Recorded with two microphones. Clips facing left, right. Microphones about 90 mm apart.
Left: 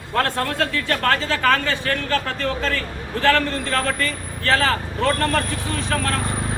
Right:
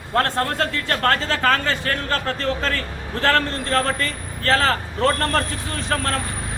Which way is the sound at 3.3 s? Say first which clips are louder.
Left 1 dB; 35° right (ahead or behind).